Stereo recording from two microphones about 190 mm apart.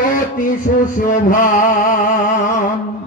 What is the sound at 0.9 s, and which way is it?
Music, 45° left (ahead or behind).